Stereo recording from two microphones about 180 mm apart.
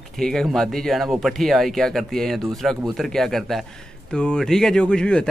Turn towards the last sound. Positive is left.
turn(degrees=5)  # may be behind; listen again after turning